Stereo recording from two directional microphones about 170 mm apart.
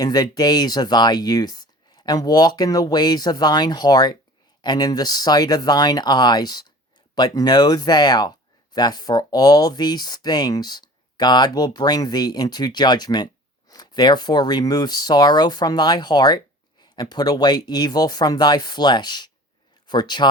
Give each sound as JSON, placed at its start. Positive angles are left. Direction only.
{"t": 0.0, "sound": "speech", "side_deg": 25}